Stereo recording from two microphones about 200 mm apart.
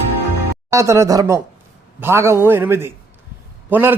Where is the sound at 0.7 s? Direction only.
15° right (ahead or behind).